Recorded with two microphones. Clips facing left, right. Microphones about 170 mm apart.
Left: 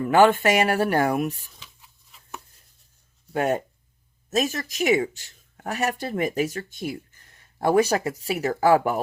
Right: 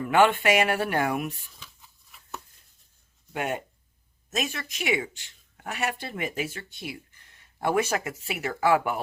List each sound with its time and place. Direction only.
0.0 s speech: 35° left (ahead or behind)
3.3 s speech: 40° left (ahead or behind)